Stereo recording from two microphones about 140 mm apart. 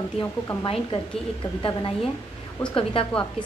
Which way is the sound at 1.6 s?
40° left (ahead or behind).